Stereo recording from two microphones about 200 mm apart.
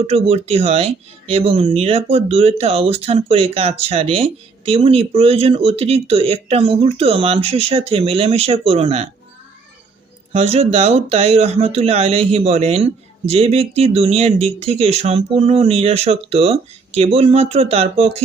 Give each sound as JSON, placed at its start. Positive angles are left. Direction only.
{"t": 0.1, "sound": "speech", "side_deg": -30}
{"t": 10.3, "sound": "speech", "side_deg": -30}